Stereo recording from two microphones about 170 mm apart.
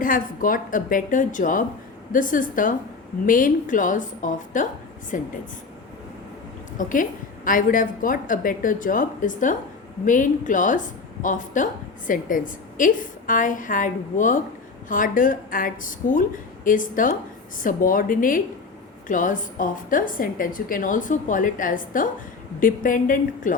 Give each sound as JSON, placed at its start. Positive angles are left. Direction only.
{"t": 0.0, "sound": "a woman's voice", "side_deg": 55}
{"t": 6.7, "sound": "a woman's voice", "side_deg": 50}